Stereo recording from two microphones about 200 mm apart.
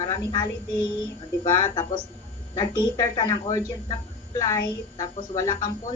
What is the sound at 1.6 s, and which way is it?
A woman's voice, 20° left (ahead or behind).